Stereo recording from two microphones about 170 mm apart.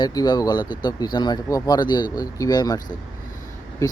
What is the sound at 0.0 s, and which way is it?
Speech, 25° left (ahead or behind).